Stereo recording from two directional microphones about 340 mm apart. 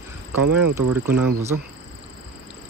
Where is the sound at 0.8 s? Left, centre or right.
Right.